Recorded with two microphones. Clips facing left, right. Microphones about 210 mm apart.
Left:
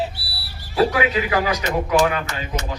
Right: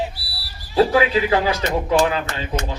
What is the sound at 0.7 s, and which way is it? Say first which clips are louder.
Speech: right 3 dB; 30° right (ahead or behind).